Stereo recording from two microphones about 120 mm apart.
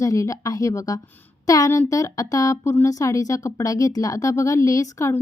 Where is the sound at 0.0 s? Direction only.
30° left (ahead or behind).